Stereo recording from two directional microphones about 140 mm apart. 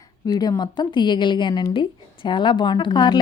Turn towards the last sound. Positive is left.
turn(degrees=30)  # may be behind; listen again after turning